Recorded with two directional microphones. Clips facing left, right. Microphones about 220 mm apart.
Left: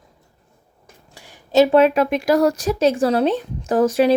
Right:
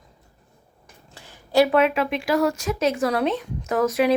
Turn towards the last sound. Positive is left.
turn(degrees=30)  # may be behind; listen again after turning